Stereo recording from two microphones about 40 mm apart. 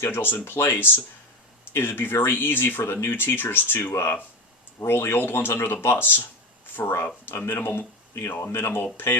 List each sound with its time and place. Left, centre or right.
0.0 s speech: left
1.7 s speech: left
4.9 s speech: left
5.8 s speech: left
7.3 s speech: left
8.3 s speech: left